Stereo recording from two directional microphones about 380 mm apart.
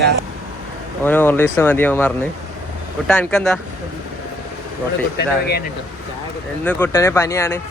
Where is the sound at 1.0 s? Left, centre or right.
Centre.